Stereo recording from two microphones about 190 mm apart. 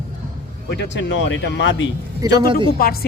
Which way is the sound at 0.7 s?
65° left (ahead or behind).